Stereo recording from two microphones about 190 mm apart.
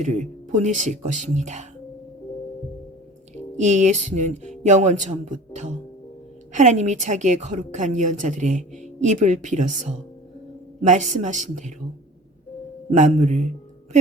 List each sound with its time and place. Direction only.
0.0 s a woman's voice: 40° right (ahead or behind)
3.3 s a woman's voice: 40° right (ahead or behind)
12.9 s a woman's voice: 40° right (ahead or behind)